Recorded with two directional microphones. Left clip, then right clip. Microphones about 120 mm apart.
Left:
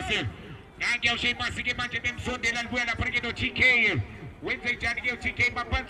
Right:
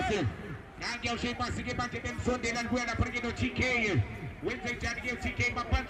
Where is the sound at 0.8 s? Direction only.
40° left (ahead or behind).